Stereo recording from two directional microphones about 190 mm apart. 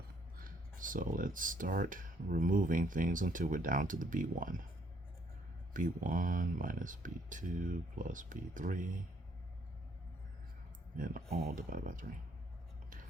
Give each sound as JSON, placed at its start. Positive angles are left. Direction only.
{"t": 0.3, "sound": "speech", "side_deg": -45}
{"t": 5.7, "sound": "speech", "side_deg": -45}
{"t": 10.9, "sound": "speech", "side_deg": -45}